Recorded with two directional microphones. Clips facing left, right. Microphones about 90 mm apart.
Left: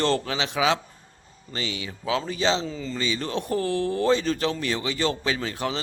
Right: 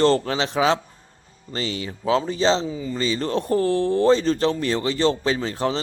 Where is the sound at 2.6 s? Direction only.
15° right (ahead or behind).